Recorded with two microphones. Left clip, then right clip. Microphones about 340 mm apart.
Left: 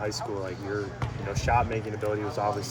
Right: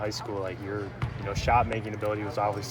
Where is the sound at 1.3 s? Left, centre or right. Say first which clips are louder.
Right 1 dB; right.